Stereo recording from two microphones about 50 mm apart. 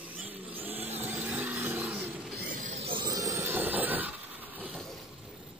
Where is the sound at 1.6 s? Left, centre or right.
Right.